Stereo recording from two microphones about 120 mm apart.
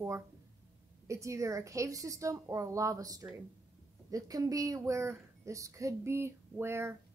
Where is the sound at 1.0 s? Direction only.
25° right (ahead or behind).